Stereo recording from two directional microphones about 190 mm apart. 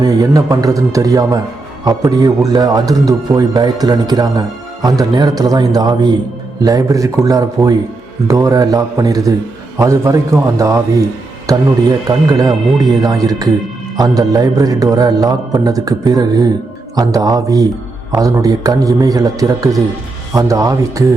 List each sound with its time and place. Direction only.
0.0 s a man's voice: 20° right (ahead or behind)